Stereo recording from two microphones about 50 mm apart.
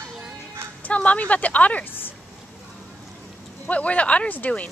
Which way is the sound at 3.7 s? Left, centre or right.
Left.